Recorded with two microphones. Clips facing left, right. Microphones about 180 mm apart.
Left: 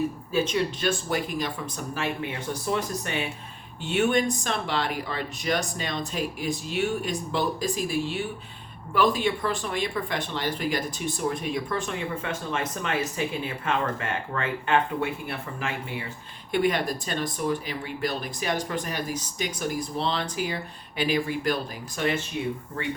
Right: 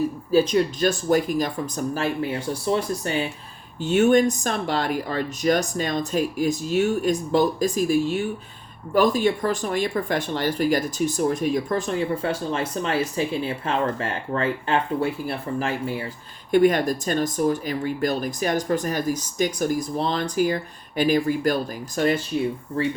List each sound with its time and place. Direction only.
0.3 s speech: 35° right (ahead or behind)